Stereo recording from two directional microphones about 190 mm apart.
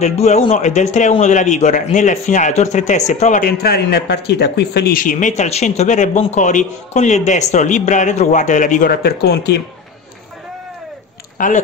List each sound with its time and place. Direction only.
0.0 s speech: 35° left (ahead or behind); by 9.6 s 60° left (ahead or behind)
11.3 s speech: 45° left (ahead or behind)